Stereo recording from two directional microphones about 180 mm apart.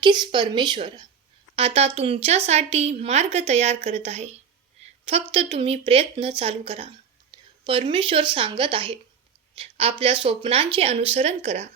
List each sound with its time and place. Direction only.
0.0 s speech: 25° right (ahead or behind)
9.6 s a sound: 35° right (ahead or behind)
10.0 s speech: 30° right (ahead or behind)